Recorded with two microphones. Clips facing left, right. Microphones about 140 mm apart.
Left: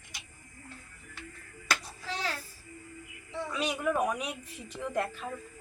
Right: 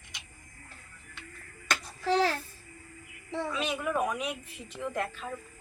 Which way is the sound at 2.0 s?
65° right (ahead or behind).